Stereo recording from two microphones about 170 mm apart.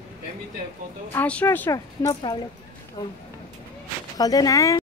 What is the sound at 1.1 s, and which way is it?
A woman's voice, 10° left (ahead or behind).